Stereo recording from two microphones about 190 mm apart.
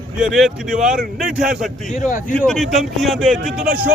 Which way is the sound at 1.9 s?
45° left (ahead or behind).